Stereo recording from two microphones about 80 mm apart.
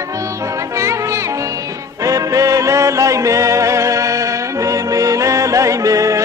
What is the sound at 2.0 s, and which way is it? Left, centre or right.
Music, right.